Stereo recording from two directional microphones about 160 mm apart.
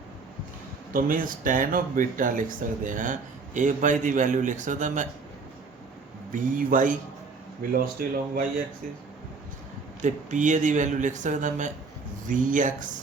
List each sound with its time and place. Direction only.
0.9 s speech: 60° right (ahead or behind)
6.3 s speech: 55° right (ahead or behind)
10.0 s speech: 50° right (ahead or behind)